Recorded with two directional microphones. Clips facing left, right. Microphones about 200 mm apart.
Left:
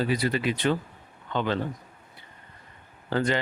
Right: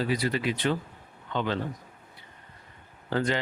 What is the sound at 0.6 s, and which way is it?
Speech, 55° left (ahead or behind).